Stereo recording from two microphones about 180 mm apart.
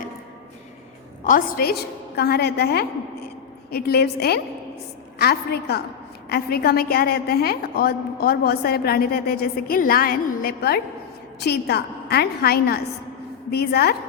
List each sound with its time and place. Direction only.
1.2 s a woman's voice: 50° left (ahead or behind)